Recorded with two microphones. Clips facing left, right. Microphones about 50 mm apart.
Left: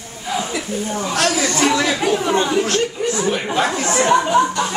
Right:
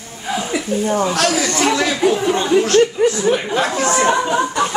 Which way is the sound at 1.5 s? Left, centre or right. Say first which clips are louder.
Even; centre.